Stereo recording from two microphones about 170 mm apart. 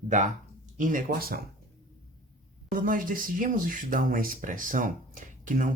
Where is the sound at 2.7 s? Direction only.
50° right (ahead or behind).